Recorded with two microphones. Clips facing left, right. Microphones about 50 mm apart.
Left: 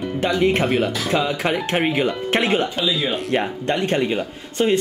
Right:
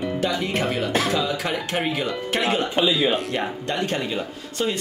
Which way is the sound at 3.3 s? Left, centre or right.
Left.